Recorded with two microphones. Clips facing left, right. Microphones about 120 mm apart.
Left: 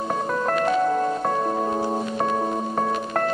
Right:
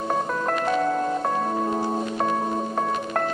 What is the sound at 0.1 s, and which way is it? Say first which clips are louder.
Music: left 1 dB; centre (ahead or behind).